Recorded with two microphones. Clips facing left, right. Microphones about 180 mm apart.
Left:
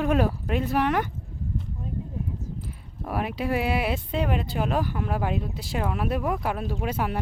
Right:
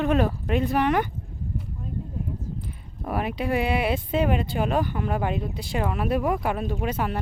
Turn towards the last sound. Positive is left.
turn(degrees=10)  # may be behind; listen again after turning